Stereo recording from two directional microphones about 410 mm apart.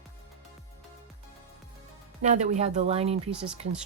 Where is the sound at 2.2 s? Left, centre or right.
Centre.